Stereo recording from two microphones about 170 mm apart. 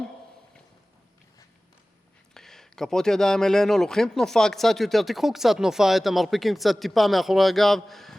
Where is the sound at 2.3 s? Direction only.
Centre (ahead or behind).